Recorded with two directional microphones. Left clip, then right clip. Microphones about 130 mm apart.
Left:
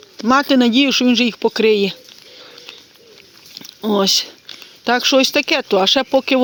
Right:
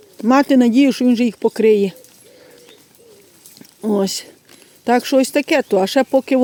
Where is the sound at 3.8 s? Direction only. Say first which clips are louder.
Left 4 dB; 30° right (ahead or behind).